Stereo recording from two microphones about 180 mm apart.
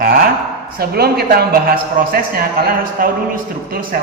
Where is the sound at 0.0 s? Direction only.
50° right (ahead or behind).